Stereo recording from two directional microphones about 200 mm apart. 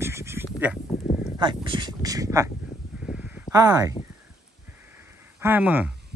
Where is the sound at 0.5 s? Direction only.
5° right (ahead or behind).